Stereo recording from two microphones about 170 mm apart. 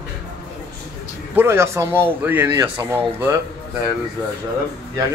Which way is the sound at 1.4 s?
15° right (ahead or behind).